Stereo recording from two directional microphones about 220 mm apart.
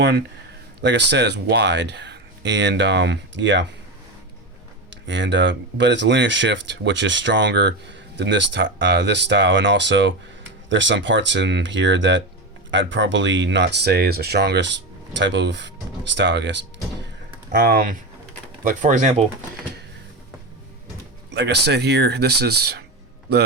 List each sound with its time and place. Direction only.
0.8 s speech: 50° right (ahead or behind)
4.9 s speech: 55° right (ahead or behind); by 19.2 s 35° right (ahead or behind)
21.2 s speech: 50° right (ahead or behind)